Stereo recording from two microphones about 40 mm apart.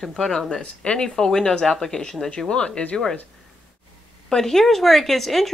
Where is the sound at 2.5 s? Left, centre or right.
Left.